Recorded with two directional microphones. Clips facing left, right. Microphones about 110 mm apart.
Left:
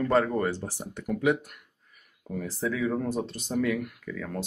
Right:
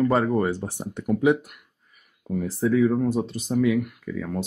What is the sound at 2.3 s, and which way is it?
Speech, 5° right (ahead or behind).